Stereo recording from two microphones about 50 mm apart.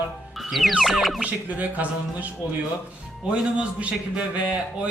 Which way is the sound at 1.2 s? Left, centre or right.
Right.